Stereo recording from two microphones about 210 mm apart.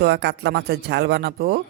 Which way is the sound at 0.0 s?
55° right (ahead or behind).